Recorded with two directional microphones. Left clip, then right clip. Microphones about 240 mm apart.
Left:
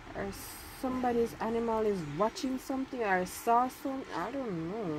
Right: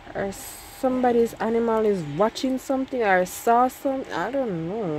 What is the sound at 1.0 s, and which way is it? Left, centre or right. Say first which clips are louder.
Speech: right 9 dB; right.